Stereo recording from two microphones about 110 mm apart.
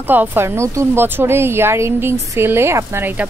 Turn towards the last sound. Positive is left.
turn(degrees=-25)  # may be behind; listen again after turning